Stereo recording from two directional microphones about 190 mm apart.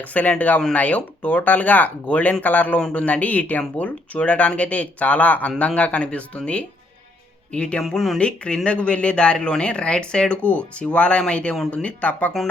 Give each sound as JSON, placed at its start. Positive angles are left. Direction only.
{"t": 0.0, "sound": "speech", "side_deg": 10}